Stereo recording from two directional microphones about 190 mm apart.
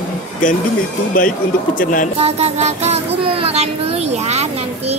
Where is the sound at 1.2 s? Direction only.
45° left (ahead or behind).